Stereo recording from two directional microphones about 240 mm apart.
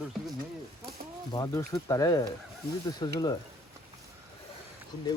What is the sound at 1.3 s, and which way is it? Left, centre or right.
Speech, centre.